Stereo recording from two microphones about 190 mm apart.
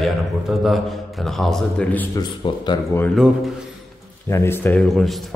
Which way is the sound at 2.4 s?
25° left (ahead or behind).